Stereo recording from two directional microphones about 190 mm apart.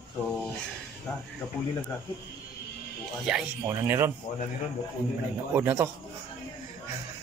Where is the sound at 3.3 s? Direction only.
Centre (ahead or behind).